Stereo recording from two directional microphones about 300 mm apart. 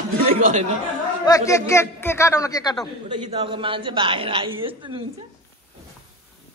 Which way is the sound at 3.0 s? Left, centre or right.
Centre.